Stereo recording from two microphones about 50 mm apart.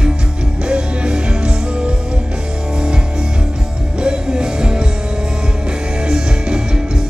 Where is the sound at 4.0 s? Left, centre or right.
Centre.